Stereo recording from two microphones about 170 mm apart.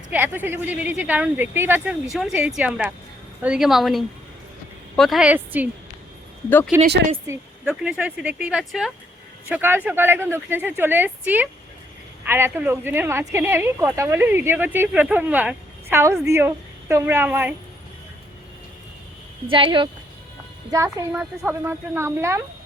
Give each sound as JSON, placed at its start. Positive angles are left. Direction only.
{"t": 0.1, "sound": "a woman's voice", "side_deg": -10}
{"t": 7.3, "sound": "speech", "side_deg": -5}
{"t": 19.5, "sound": "speech", "side_deg": -30}
{"t": 20.7, "sound": "speech", "side_deg": -20}